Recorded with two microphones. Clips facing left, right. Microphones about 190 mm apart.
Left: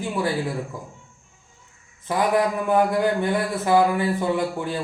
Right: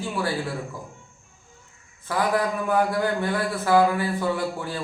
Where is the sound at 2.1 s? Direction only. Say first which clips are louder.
Left 3 dB; 20° left (ahead or behind).